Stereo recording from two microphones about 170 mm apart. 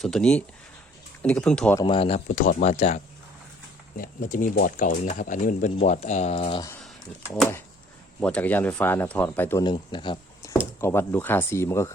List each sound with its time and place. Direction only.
0.0 s speech: 5° left (ahead or behind)
1.8 s speech: 30° left (ahead or behind)
3.9 s speech: 55° left (ahead or behind); by 6.6 s 35° left (ahead or behind)
8.2 s speech: 5° left (ahead or behind)
9.6 s speech: 30° left (ahead or behind)
10.8 s speech: 15° left (ahead or behind)